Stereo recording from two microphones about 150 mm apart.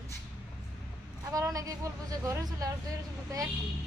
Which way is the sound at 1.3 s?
25° right (ahead or behind).